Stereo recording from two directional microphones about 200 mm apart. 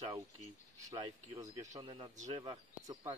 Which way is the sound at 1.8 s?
30° right (ahead or behind).